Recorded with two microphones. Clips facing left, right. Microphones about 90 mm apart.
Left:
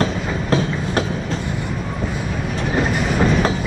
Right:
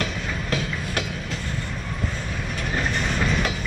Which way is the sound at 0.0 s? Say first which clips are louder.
Left 7 dB; 35° left (ahead or behind).